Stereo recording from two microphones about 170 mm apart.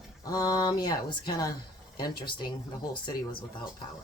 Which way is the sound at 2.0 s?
25° left (ahead or behind).